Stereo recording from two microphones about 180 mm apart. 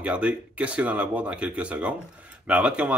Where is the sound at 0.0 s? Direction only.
5° right (ahead or behind).